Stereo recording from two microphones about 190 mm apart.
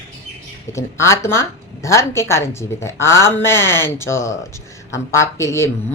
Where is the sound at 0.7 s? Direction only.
15° left (ahead or behind).